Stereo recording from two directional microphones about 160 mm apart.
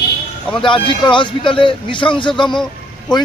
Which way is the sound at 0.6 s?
30° left (ahead or behind).